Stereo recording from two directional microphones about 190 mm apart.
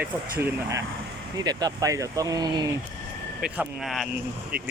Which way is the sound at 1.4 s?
20° right (ahead or behind).